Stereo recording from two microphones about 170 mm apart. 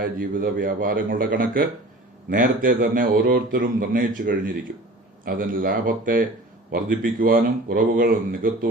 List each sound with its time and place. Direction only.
0.0 s a man's voice: 55° right (ahead or behind)